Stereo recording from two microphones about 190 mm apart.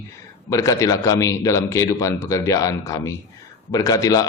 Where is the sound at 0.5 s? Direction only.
15° left (ahead or behind).